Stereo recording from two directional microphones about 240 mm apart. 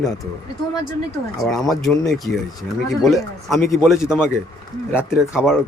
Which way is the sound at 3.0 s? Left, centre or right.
Centre.